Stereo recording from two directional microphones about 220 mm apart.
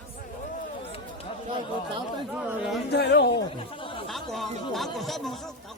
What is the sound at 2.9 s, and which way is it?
Speech, 50° left (ahead or behind).